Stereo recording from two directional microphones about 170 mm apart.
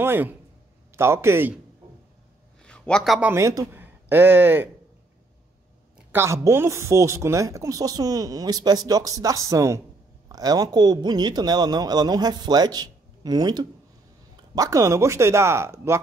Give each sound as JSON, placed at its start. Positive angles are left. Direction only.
{"t": 0.0, "sound": "speech", "side_deg": -10}
{"t": 2.6, "sound": "a man's voice", "side_deg": 5}
{"t": 5.9, "sound": "a woman's voice", "side_deg": -15}